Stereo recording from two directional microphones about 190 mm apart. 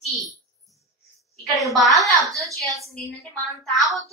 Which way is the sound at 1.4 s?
Centre (ahead or behind).